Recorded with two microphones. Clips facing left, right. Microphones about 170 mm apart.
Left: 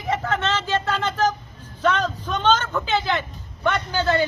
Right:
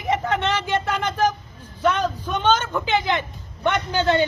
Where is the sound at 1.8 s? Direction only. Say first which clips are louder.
Right 1 dB; 10° right (ahead or behind).